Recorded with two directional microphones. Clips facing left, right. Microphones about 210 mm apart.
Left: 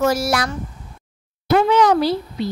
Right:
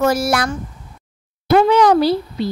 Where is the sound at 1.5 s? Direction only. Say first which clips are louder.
Right 3 dB; 35° right (ahead or behind).